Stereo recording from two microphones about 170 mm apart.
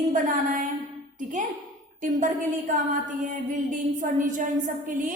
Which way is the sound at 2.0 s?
50° right (ahead or behind).